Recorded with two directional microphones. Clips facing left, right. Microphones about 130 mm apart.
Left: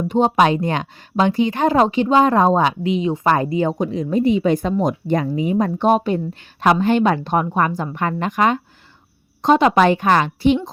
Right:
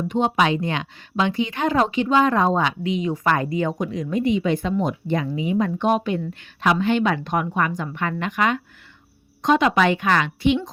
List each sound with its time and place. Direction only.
0.1 s speech: 40° left (ahead or behind)